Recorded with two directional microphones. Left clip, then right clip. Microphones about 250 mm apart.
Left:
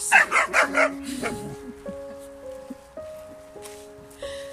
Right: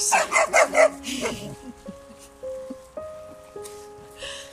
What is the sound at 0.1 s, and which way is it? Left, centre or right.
Dog, centre.